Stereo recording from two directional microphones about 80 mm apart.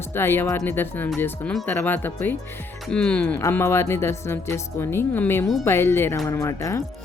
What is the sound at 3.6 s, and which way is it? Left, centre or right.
Speech, left.